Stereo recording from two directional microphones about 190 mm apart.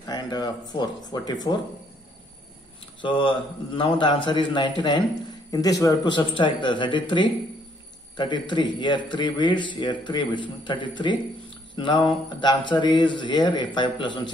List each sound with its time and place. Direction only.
0.0 s speech: 20° left (ahead or behind)
3.0 s a man's voice: 25° left (ahead or behind)